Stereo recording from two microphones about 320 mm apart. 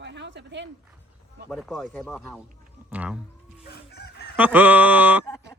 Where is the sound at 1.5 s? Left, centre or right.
Centre.